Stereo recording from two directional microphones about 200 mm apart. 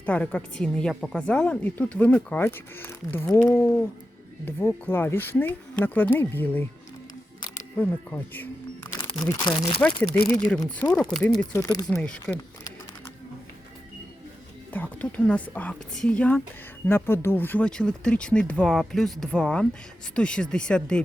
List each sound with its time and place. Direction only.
0.0 s a woman's voice: 5° left (ahead or behind)
7.8 s a woman's voice: 10° left (ahead or behind)
11.9 s speech: 5° left (ahead or behind)
14.7 s a woman's voice: 5° left (ahead or behind)